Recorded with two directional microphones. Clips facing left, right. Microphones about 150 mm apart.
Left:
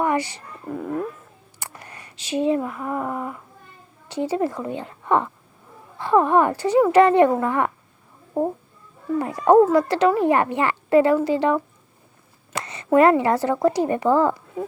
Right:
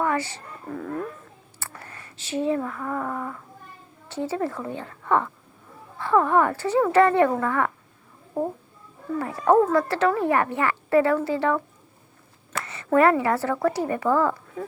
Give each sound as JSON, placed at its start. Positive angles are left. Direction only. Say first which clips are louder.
{"t": 0.0, "sound": "a woman's voice", "louder": "left 3 dB", "side_deg": 15}